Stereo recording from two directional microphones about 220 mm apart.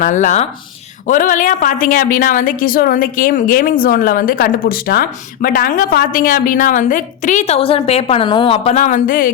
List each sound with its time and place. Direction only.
0.0 s a woman's voice: 35° left (ahead or behind)